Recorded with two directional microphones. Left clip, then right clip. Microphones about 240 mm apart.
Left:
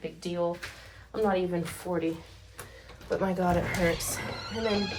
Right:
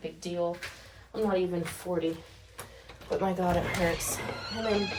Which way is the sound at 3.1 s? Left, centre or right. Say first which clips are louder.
Left 1 dB; centre.